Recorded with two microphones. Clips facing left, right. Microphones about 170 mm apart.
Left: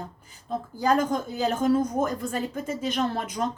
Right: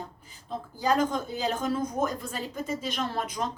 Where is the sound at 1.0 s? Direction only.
45° left (ahead or behind).